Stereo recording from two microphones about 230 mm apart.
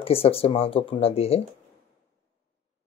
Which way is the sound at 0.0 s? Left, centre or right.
Left.